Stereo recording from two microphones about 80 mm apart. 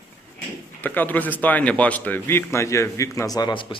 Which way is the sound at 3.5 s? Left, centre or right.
Left.